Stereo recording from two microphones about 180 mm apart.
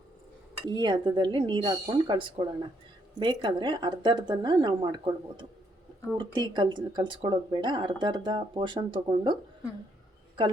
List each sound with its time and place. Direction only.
0.7 s speech: 25° right (ahead or behind)